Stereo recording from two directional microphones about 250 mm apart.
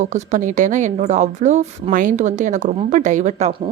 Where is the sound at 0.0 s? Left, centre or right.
Right.